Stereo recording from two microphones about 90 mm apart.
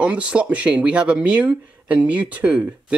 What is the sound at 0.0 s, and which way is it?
Speech, 15° right (ahead or behind).